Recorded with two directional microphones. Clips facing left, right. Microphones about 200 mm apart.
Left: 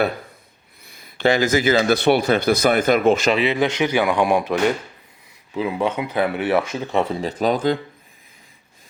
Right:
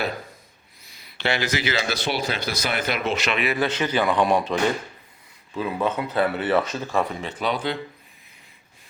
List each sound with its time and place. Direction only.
0.9 s speech: 50° left (ahead or behind)
3.3 s speech: 25° left (ahead or behind)
5.5 s speech: 15° left (ahead or behind); by 7.8 s 45° left (ahead or behind)